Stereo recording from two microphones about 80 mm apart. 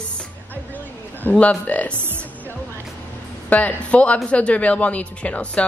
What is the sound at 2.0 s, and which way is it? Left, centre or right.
Speech, right.